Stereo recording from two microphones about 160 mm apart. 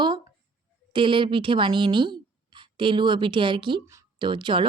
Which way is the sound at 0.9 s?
30° right (ahead or behind).